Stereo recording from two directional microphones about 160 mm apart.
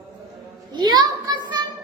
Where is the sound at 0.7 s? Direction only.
25° right (ahead or behind).